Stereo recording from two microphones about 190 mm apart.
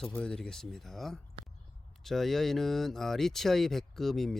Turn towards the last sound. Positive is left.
turn(degrees=0)  # may be behind; listen again after turning